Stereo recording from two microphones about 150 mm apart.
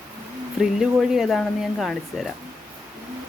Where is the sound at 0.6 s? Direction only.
5° right (ahead or behind).